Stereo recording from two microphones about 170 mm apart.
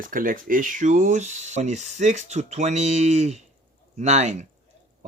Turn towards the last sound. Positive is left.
turn(degrees=-40)  # may be behind; listen again after turning